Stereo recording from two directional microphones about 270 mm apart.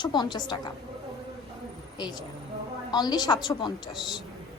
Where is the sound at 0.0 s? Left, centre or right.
Centre.